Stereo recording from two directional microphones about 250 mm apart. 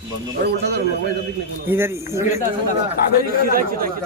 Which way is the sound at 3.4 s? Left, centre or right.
Right.